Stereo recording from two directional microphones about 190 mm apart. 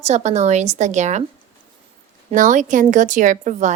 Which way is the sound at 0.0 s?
35° right (ahead or behind).